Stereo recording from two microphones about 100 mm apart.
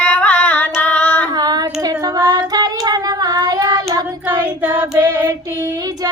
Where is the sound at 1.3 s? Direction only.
40° right (ahead or behind).